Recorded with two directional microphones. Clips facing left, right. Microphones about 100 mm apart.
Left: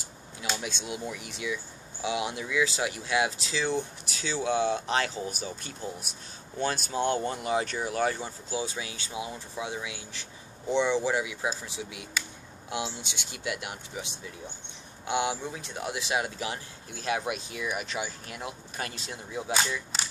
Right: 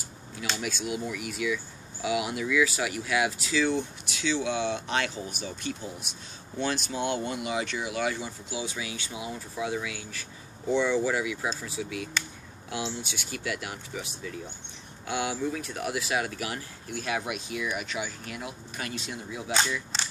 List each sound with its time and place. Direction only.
0.6 s speech: 25° left (ahead or behind)